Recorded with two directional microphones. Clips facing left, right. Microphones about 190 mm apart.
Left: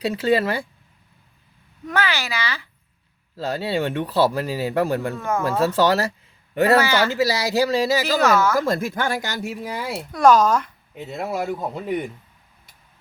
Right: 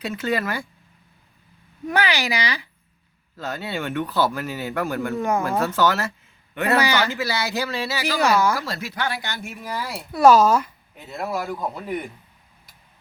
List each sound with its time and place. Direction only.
0.0 s speech: 30° left (ahead or behind)
1.9 s speech: 15° right (ahead or behind)
3.3 s speech: 35° left (ahead or behind)
8.2 s speech: 15° right (ahead or behind)
8.5 s speech: 50° left (ahead or behind)
9.7 s speech: 25° left (ahead or behind)
10.1 s speech: 5° right (ahead or behind)
11.0 s speech: 25° left (ahead or behind)